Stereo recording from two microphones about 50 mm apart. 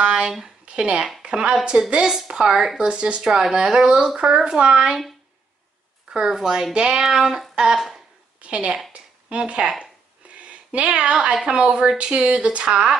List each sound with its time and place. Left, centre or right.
0.0 s a sound: centre
0.7 s speech: right; by 2.9 s centre
2.9 s speech: right
6.1 s speech: centre
8.4 s a woman's voice: right
8.9 s a sound: right
10.4 s speech: right